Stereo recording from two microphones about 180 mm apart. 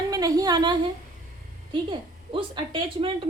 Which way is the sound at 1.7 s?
25° right (ahead or behind).